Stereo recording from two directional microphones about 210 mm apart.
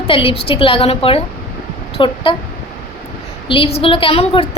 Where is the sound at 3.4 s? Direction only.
25° left (ahead or behind).